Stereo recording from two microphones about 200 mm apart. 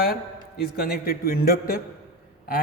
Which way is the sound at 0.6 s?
50° left (ahead or behind).